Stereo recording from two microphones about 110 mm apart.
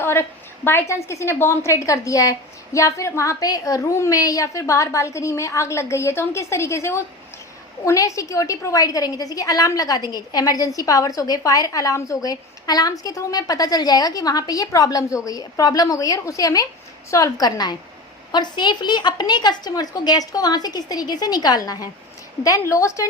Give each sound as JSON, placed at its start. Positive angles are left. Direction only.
{"t": 0.0, "sound": "a woman's voice", "side_deg": 20}